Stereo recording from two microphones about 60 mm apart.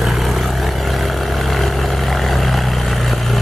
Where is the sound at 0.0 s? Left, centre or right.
Centre.